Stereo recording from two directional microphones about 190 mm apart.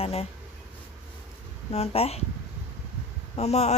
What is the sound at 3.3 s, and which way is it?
Speech, 35° left (ahead or behind).